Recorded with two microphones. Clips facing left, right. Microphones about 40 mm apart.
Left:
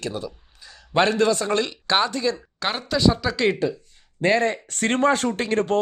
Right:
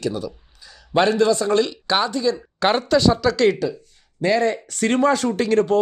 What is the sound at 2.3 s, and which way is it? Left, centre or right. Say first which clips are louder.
Speech: right 8 dB; centre.